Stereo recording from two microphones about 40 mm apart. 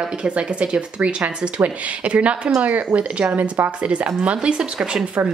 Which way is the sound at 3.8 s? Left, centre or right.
Right.